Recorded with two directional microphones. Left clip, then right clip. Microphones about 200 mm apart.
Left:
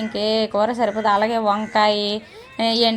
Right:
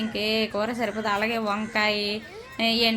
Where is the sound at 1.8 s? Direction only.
Centre (ahead or behind).